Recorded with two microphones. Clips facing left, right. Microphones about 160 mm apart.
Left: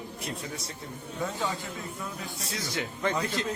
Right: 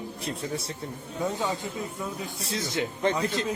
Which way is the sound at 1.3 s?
20° right (ahead or behind).